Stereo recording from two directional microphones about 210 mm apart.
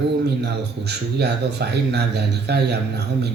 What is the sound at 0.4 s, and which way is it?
Speech, 50° right (ahead or behind).